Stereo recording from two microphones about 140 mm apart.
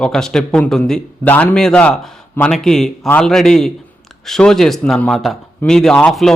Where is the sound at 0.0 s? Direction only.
5° left (ahead or behind).